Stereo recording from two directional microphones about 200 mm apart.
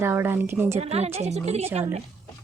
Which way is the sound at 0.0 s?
10° right (ahead or behind).